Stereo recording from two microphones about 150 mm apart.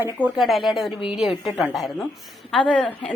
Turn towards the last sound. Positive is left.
turn(degrees=5)  # may be behind; listen again after turning